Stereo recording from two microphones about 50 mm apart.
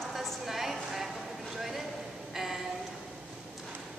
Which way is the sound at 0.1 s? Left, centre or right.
Centre.